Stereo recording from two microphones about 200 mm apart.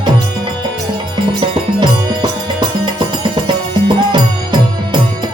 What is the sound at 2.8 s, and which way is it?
Music, 20° right (ahead or behind).